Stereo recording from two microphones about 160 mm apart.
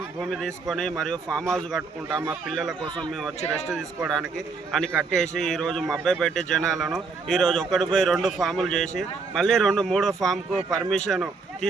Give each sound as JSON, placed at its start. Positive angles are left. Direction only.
{"t": 0.2, "sound": "a man's voice", "side_deg": 5}
{"t": 3.4, "sound": "speech", "side_deg": 45}
{"t": 4.4, "sound": "a man's voice", "side_deg": 0}